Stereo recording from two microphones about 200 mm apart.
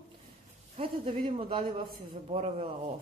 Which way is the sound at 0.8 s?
25° right (ahead or behind).